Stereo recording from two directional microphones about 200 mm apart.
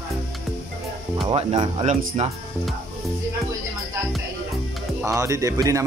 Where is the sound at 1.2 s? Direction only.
25° right (ahead or behind).